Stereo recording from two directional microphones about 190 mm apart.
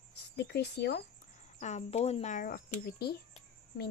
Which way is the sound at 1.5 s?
35° left (ahead or behind).